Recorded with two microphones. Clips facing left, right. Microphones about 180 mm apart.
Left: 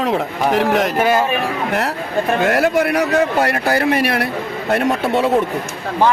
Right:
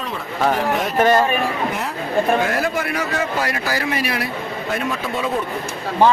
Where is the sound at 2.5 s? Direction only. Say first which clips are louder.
Left 6 dB; 65° left (ahead or behind).